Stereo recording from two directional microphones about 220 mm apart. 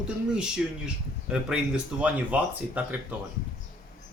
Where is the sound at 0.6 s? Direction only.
5° right (ahead or behind).